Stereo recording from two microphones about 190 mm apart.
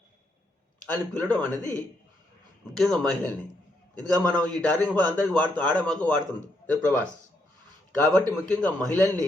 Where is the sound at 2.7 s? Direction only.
Centre (ahead or behind).